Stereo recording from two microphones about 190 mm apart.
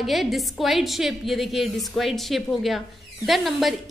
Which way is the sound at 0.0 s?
Centre (ahead or behind).